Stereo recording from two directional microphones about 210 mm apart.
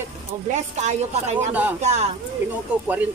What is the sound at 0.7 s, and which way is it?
Speech, 35° right (ahead or behind).